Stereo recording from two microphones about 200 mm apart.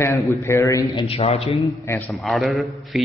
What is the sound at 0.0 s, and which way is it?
A man's voice, 15° left (ahead or behind).